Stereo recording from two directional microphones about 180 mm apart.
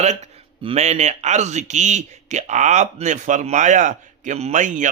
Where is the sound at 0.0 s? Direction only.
40° right (ahead or behind).